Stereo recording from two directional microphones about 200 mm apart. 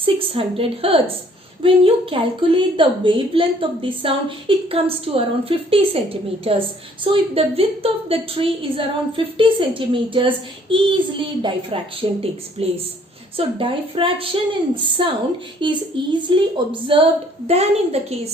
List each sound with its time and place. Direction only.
0.0 s a woman's voice: 30° right (ahead or behind)